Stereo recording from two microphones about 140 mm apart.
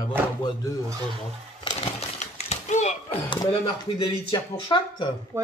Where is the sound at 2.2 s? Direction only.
55° left (ahead or behind).